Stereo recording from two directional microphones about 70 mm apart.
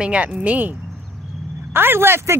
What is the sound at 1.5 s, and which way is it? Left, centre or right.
Speech, right.